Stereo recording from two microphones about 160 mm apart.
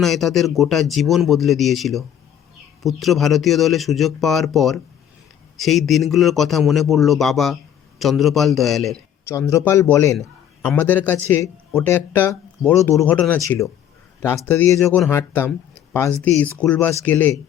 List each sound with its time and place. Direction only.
0.0 s a man's voice: centre (ahead or behind)
9.2 s a man's voice: 15° left (ahead or behind)